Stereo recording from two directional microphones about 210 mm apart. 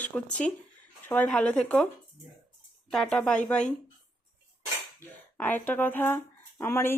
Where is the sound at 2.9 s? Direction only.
5° left (ahead or behind).